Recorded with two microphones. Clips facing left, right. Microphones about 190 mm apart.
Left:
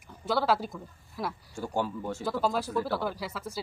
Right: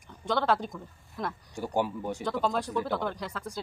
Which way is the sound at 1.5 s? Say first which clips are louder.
Right 2 dB; 15° right (ahead or behind).